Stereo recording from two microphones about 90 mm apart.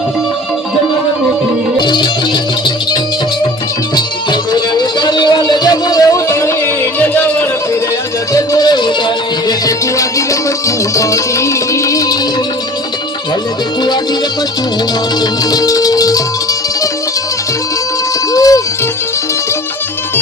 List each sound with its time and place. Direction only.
1.8 s music: 55° left (ahead or behind)
3.9 s music: 50° left (ahead or behind); by 6.5 s 35° left (ahead or behind)
7.0 s a sound: 20° left (ahead or behind)
8.3 s music: 40° left (ahead or behind)
15.2 s music: 45° left (ahead or behind)
18.3 s music: 40° left (ahead or behind)